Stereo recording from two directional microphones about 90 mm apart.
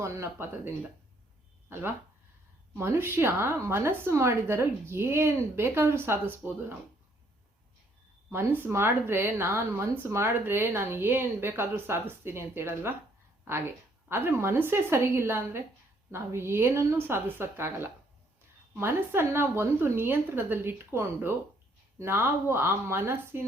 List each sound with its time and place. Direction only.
0.0 s a woman's voice: 30° right (ahead or behind)
1.7 s a woman's voice: 25° right (ahead or behind)
8.3 s a woman's voice: 25° right (ahead or behind)